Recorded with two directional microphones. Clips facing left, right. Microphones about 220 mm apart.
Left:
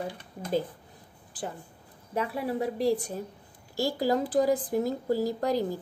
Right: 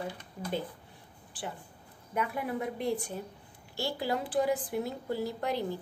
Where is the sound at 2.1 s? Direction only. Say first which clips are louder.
Left 3 dB; 30° left (ahead or behind).